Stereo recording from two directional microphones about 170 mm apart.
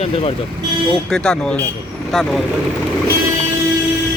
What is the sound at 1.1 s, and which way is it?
Speech, 5° left (ahead or behind).